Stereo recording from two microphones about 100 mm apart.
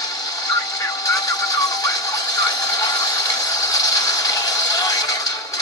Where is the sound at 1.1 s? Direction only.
35° left (ahead or behind).